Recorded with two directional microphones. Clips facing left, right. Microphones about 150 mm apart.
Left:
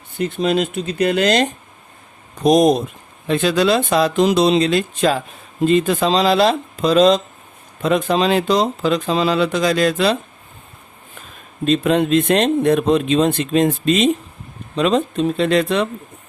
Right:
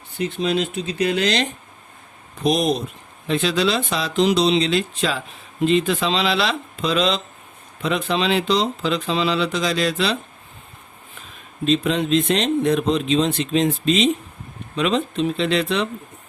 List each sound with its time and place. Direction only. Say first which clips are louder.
0.2 s speech: left 3 dB; 50° left (ahead or behind)
11.6 s speech: left 4 dB; 50° left (ahead or behind)